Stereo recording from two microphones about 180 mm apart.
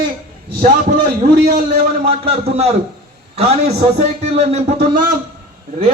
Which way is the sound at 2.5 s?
35° right (ahead or behind).